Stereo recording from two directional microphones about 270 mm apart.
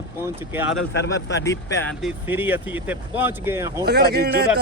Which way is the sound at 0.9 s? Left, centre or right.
Left.